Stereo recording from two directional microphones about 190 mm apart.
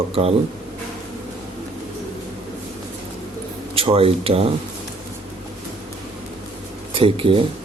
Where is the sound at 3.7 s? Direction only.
30° right (ahead or behind).